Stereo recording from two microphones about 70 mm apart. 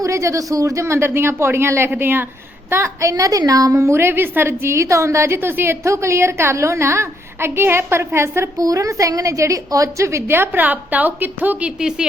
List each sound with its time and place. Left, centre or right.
0.0 s a woman's voice: right
8.5 s a woman's voice: right
11.8 s speech: centre